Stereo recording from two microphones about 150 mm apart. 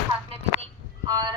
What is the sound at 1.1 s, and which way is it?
Music, 30° right (ahead or behind).